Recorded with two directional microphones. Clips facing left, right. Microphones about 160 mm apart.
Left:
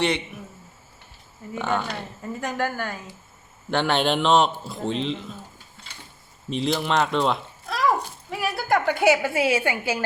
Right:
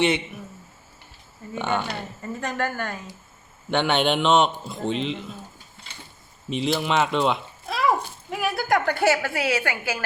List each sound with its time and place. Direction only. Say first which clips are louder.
1.5 s a man's voice: even; centre (ahead or behind)
6.5 s a sound: even; centre (ahead or behind)
9.0 s a woman's voice: left 5 dB; 15° left (ahead or behind)